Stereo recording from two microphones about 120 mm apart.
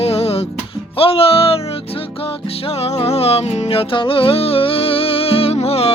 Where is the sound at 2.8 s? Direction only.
60° left (ahead or behind).